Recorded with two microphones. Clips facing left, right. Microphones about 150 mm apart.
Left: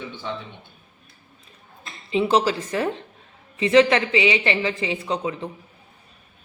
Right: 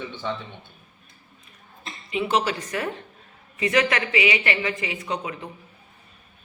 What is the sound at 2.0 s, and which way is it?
A woman's voice, 30° left (ahead or behind).